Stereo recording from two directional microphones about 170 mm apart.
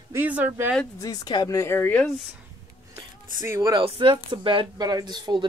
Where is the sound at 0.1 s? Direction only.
10° right (ahead or behind).